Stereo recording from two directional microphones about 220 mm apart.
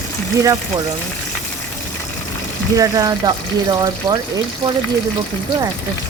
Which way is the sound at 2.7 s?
15° right (ahead or behind).